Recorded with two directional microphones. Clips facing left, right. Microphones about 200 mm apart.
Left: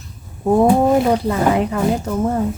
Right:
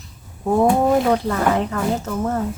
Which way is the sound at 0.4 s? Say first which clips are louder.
Left 3 dB; 10° left (ahead or behind).